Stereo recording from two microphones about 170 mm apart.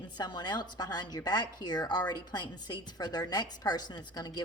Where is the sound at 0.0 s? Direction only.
25° left (ahead or behind).